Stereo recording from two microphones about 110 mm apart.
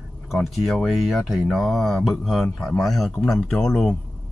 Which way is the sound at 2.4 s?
20° left (ahead or behind).